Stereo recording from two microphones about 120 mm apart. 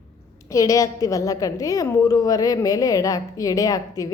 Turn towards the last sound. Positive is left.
turn(degrees=30)  # may be behind; listen again after turning